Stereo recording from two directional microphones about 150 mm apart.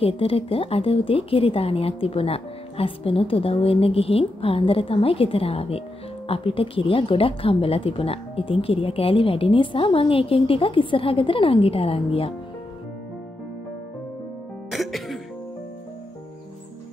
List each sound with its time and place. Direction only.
0.0 s a woman's voice: 40° left (ahead or behind)
14.7 s music: centre (ahead or behind)